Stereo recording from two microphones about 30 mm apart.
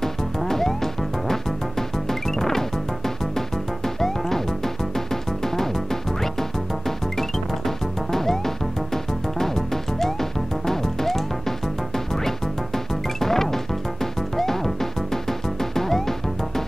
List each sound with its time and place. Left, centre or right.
0.0 s music: centre
4.9 s music: centre
7.2 s music: centre
12.3 s music: centre